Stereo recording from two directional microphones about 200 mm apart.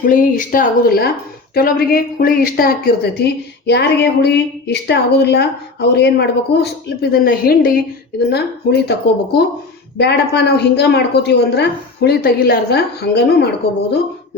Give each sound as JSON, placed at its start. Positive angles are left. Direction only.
{"t": 0.0, "sound": "a woman's voice", "side_deg": 40}